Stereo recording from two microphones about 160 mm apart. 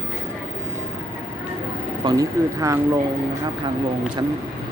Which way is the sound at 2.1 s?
20° right (ahead or behind).